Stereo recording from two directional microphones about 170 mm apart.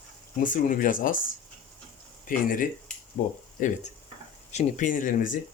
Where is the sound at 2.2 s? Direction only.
55° left (ahead or behind).